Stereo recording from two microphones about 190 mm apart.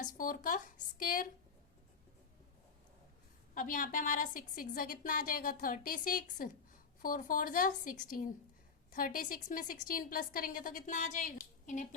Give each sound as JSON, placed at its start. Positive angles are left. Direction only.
{"t": 0.0, "sound": "a woman's voice", "side_deg": 45}
{"t": 3.5, "sound": "a woman's voice", "side_deg": 45}